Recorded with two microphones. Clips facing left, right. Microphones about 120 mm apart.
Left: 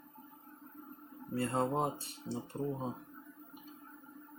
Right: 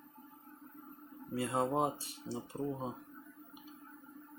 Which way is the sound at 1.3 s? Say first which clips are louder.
Even; 5° right (ahead or behind).